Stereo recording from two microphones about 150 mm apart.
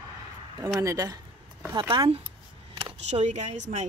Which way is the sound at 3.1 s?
50° right (ahead or behind).